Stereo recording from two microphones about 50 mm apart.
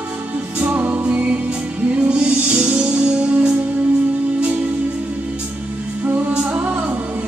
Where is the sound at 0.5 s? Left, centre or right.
Right.